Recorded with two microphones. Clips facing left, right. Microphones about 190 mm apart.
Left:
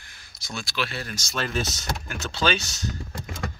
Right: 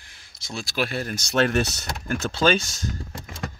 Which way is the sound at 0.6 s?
45° right (ahead or behind).